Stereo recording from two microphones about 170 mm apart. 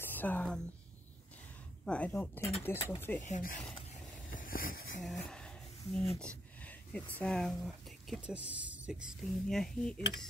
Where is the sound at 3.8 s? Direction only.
45° left (ahead or behind).